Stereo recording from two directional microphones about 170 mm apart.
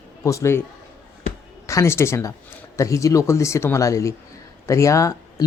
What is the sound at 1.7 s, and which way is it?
Speech, 15° left (ahead or behind).